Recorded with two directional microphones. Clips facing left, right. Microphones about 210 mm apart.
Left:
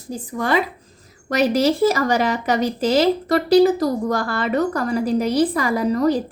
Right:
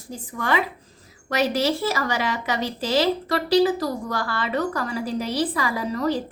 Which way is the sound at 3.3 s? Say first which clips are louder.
Left 5 dB; 45° left (ahead or behind).